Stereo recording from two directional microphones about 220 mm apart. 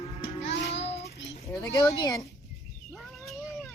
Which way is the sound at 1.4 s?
15° left (ahead or behind).